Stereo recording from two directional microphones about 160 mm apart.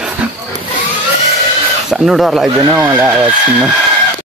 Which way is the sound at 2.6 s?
15° right (ahead or behind).